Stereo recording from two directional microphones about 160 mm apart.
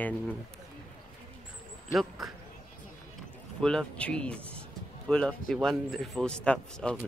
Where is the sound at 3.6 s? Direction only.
5° left (ahead or behind).